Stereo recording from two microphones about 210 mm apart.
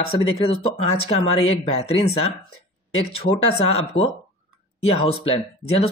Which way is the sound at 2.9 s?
30° left (ahead or behind).